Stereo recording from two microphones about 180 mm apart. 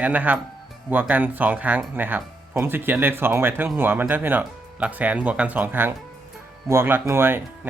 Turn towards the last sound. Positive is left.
turn(degrees=-15)  # may be behind; listen again after turning